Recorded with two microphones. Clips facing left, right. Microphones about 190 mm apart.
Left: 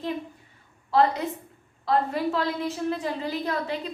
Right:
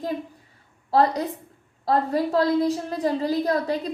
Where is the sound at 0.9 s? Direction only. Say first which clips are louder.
Right 2 dB; 40° right (ahead or behind).